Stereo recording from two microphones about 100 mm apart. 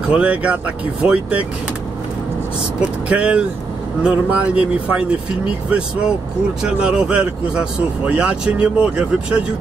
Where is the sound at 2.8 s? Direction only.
10° right (ahead or behind).